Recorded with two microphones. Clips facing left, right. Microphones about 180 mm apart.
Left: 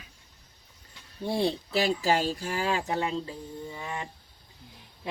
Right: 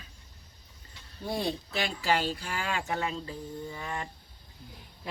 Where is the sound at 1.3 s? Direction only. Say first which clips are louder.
Left 5 dB; 30° left (ahead or behind).